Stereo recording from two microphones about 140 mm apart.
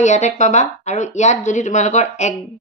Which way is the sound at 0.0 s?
55° left (ahead or behind).